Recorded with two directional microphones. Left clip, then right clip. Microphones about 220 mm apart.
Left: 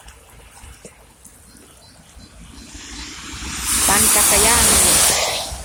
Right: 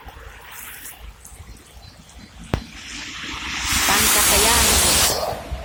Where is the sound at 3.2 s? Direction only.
15° left (ahead or behind).